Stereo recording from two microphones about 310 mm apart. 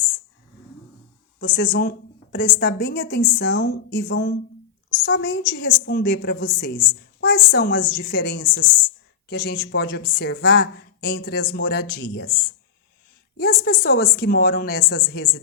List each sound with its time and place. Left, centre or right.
1.4 s a woman's voice: left
13.3 s a woman's voice: left